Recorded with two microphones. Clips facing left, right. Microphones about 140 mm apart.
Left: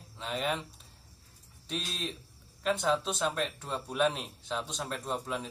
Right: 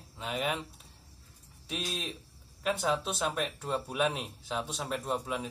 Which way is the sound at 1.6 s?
5° right (ahead or behind).